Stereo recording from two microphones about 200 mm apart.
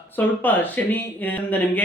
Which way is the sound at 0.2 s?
10° left (ahead or behind).